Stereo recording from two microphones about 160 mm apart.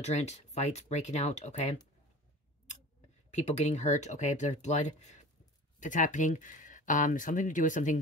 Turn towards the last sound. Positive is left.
turn(degrees=50)  # may be behind; listen again after turning